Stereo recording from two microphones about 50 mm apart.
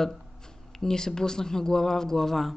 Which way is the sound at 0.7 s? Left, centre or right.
Centre.